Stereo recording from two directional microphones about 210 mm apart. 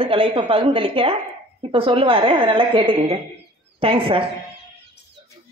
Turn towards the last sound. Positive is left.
turn(degrees=-25)  # may be behind; listen again after turning